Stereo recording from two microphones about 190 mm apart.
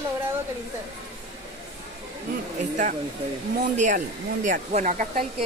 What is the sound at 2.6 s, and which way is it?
Speech, 40° right (ahead or behind).